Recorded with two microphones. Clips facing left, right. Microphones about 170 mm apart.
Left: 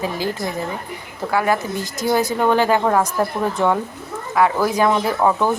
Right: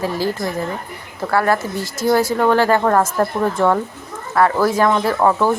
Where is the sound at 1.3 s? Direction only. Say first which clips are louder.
Right 2 dB; 15° left (ahead or behind).